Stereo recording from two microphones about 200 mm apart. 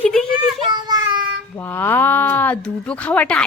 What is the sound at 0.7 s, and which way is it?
Speech, 20° right (ahead or behind).